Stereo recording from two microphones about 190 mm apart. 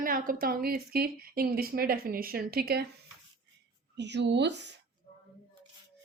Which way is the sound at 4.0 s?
65° right (ahead or behind).